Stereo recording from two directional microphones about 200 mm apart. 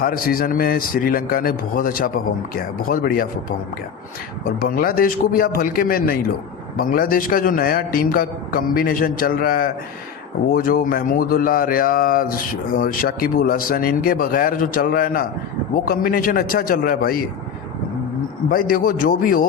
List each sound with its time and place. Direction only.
0.0 s speech: 45° left (ahead or behind)
4.6 s speech: 45° left (ahead or behind)
18.4 s speech: 45° left (ahead or behind)